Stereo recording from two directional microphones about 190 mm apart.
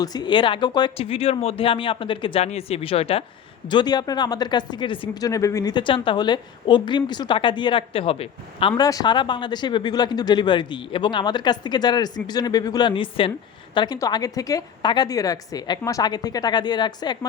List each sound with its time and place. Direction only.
0.0 s speech: 20° left (ahead or behind)